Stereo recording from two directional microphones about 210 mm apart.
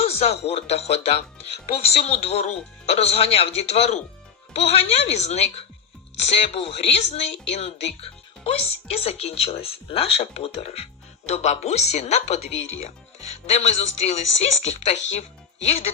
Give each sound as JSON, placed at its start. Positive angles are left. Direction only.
{"t": 0.0, "sound": "a sound", "side_deg": 30}
{"t": 0.5, "sound": "speech", "side_deg": 30}
{"t": 8.0, "sound": "music", "side_deg": 30}
{"t": 9.0, "sound": "speech", "side_deg": 30}